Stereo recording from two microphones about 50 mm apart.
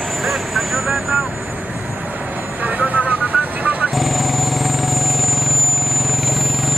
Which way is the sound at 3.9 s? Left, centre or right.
Centre.